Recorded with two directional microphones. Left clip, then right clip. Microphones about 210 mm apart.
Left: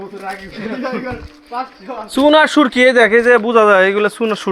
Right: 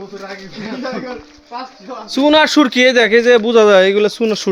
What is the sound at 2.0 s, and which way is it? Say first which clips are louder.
Speech: left 1 dB; 10° right (ahead or behind).